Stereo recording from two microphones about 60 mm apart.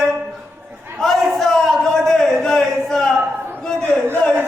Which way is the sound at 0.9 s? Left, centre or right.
Centre.